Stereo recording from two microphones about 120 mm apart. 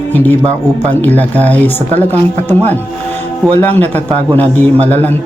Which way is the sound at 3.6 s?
15° left (ahead or behind).